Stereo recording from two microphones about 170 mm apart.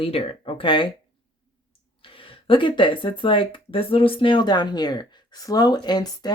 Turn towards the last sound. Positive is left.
turn(degrees=25)  # may be behind; listen again after turning